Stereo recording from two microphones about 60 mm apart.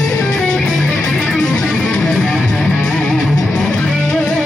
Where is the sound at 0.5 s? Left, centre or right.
Left.